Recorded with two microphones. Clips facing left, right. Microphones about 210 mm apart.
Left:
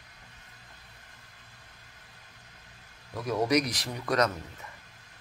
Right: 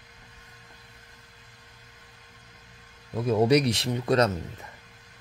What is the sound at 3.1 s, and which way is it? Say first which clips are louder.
Speech: right 5 dB; 25° right (ahead or behind).